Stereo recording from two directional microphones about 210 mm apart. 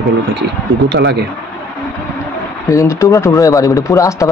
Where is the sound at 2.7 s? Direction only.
15° left (ahead or behind).